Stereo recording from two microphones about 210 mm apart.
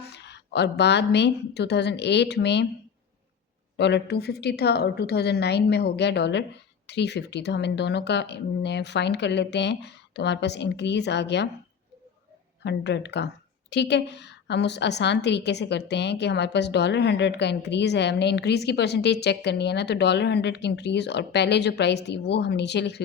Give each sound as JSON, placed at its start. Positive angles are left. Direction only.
{"t": 0.0, "sound": "a woman's voice", "side_deg": 55}
{"t": 3.8, "sound": "a woman's voice", "side_deg": 55}
{"t": 12.6, "sound": "a woman's voice", "side_deg": 55}